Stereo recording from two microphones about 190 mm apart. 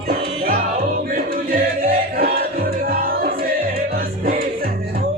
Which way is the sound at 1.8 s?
50° right (ahead or behind).